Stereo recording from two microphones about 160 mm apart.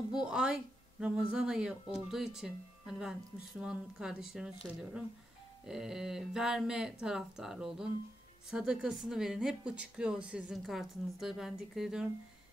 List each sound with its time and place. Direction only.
0.2 s speech: 5° right (ahead or behind)